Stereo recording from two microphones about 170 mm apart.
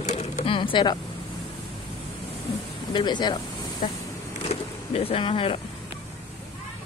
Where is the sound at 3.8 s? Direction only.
45° left (ahead or behind).